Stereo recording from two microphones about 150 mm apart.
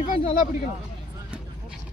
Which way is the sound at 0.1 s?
65° left (ahead or behind).